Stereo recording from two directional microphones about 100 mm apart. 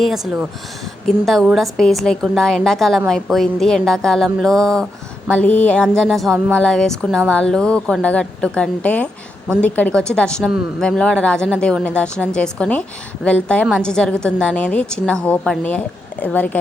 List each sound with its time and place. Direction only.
1.0 s a woman's voice: 5° left (ahead or behind)